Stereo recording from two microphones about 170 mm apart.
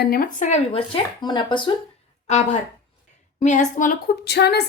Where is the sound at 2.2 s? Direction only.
40° left (ahead or behind).